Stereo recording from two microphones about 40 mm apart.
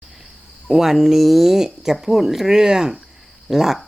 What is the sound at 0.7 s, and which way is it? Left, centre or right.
A woman's voice, centre.